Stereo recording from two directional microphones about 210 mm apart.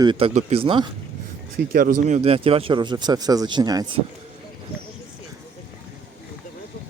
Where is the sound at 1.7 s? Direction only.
35° right (ahead or behind); by 4.0 s 20° right (ahead or behind).